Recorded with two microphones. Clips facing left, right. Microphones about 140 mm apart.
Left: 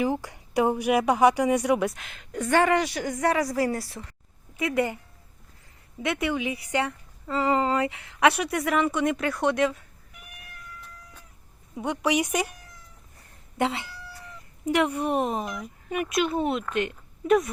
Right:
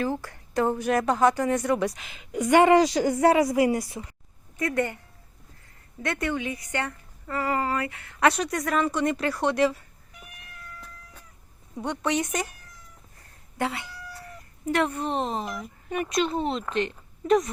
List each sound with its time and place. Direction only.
0.0 s a woman's voice: 15° left (ahead or behind)
1.9 s a woman's voice: centre (ahead or behind); by 4.0 s 20° right (ahead or behind)
4.5 s a woman's voice: 5° left (ahead or behind)
6.0 s a woman's voice: 5° left (ahead or behind); by 7.9 s 20° left (ahead or behind)
7.9 s speech: 10° left (ahead or behind)
11.8 s a woman's voice: 5° left (ahead or behind)
13.6 s a woman's voice: 25° left (ahead or behind)
15.4 s a woman's voice: centre (ahead or behind)